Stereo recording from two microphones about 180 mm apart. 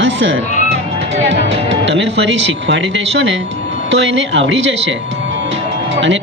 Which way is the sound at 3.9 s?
80° right.